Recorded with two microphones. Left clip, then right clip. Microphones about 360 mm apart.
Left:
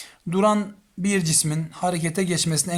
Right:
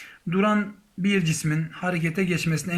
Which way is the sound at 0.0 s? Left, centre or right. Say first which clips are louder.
Left 4 dB; centre.